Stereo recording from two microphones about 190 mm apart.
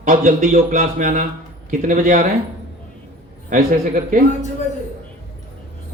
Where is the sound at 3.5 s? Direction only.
45° right (ahead or behind).